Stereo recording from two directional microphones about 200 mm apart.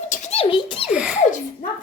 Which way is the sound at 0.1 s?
35° left (ahead or behind).